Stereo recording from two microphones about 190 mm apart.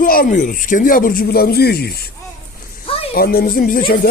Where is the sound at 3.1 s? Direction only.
50° left (ahead or behind).